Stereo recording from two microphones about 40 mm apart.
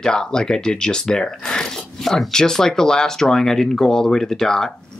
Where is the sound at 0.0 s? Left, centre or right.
Centre.